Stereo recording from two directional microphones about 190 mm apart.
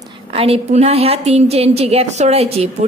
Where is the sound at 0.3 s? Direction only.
30° right (ahead or behind).